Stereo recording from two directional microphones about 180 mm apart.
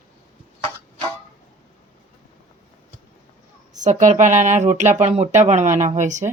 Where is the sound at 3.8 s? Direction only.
40° right (ahead or behind).